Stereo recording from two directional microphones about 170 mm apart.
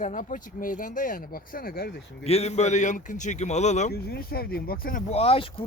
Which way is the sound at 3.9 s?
65° left (ahead or behind).